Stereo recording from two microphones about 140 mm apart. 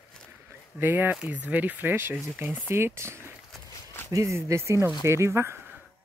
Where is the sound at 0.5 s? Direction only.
15° right (ahead or behind).